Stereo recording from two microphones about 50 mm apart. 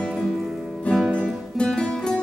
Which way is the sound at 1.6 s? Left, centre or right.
Centre.